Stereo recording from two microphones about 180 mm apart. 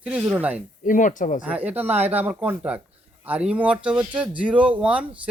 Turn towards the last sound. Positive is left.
turn(degrees=-5)  # may be behind; listen again after turning